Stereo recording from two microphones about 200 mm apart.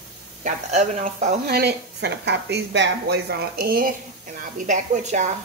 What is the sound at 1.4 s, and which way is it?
Speech, 55° right (ahead or behind).